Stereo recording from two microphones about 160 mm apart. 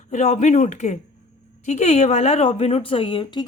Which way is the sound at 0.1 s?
45° left (ahead or behind).